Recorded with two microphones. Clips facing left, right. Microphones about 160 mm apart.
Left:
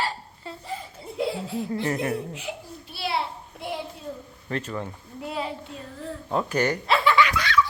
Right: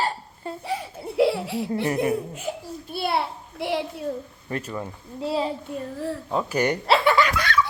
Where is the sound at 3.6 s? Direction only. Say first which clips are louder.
Right 7 dB; 75° right (ahead or behind).